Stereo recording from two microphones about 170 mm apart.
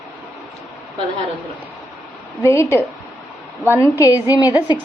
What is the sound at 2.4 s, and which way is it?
A woman's voice, 15° left (ahead or behind).